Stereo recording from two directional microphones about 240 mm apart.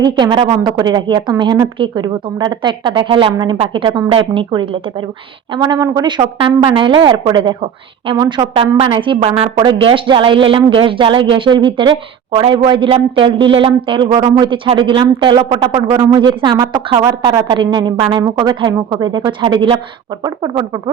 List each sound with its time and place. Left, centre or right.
0.0 s a woman's voice: centre